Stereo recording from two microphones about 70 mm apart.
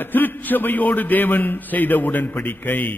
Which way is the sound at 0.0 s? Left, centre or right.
Left.